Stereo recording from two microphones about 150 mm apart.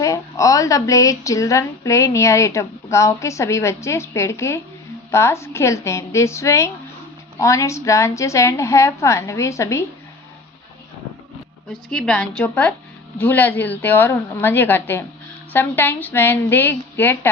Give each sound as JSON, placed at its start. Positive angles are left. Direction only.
{"t": 0.0, "sound": "speech", "side_deg": 20}
{"t": 11.7, "sound": "a woman's voice", "side_deg": 5}